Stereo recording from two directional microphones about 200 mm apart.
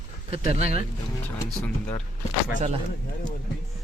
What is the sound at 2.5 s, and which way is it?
Speech, 35° right (ahead or behind).